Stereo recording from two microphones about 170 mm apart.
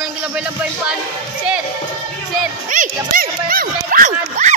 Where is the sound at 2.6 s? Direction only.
50° right (ahead or behind).